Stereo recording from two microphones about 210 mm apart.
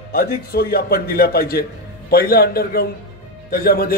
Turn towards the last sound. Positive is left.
turn(degrees=45)  # may be behind; listen again after turning